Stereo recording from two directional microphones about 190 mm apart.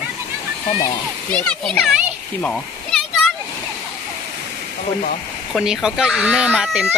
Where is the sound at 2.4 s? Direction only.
5° left (ahead or behind).